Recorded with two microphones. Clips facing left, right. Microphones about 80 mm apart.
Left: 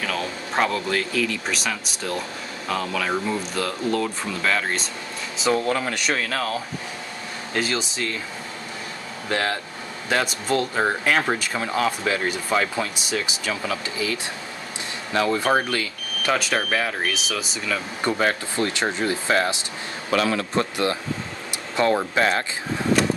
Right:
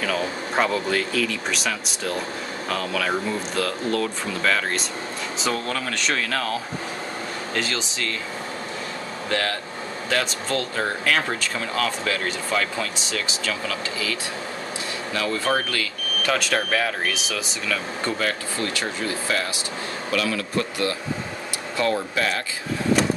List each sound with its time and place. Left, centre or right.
0.0 s speech: centre
5.5 s speech: left
5.9 s speech: centre
7.5 s speech: centre
9.3 s speech: centre
15.1 s speech: left
16.3 s speech: centre
18.2 s speech: left
21.9 s speech: left